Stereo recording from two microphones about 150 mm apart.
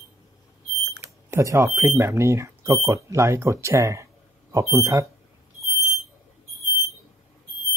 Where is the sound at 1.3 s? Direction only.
20° right (ahead or behind).